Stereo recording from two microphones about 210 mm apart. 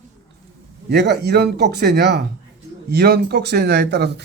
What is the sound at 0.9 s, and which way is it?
Speech, 50° right (ahead or behind).